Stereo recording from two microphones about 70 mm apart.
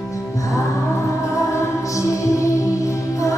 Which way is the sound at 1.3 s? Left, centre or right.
Left.